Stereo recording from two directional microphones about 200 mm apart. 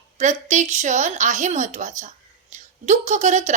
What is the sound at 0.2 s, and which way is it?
A woman's voice, 35° right (ahead or behind).